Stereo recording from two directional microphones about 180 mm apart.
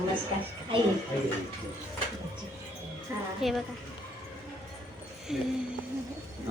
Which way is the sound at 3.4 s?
Centre (ahead or behind).